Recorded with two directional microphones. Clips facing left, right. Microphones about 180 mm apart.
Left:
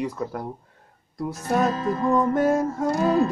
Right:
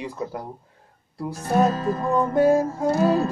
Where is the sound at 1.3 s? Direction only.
35° right (ahead or behind).